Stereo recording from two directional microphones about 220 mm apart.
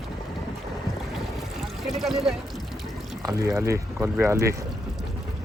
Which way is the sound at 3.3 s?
15° right (ahead or behind).